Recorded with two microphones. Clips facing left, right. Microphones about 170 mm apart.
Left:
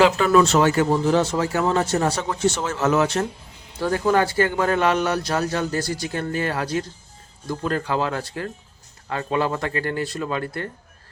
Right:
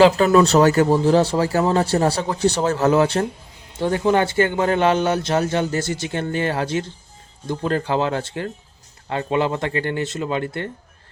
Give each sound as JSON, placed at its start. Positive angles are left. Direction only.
{"t": 0.3, "sound": "a man's voice", "side_deg": -35}